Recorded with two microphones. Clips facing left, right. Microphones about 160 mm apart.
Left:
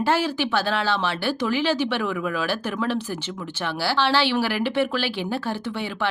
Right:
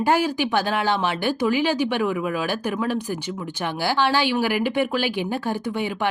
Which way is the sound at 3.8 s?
15° right (ahead or behind).